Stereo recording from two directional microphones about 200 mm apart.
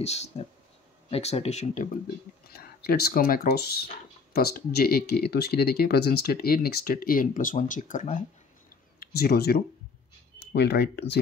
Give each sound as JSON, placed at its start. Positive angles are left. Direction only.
{"t": 0.0, "sound": "speech", "side_deg": 30}
{"t": 2.5, "sound": "speech", "side_deg": 50}
{"t": 9.0, "sound": "speech", "side_deg": 50}